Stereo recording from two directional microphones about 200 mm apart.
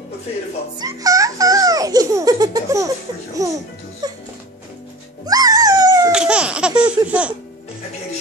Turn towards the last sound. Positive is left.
turn(degrees=-5)  # may be behind; listen again after turning